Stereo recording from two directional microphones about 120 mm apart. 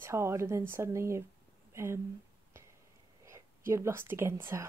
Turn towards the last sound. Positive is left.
turn(degrees=-20)  # may be behind; listen again after turning